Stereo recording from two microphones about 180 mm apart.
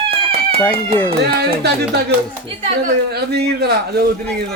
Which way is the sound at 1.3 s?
65° right (ahead or behind).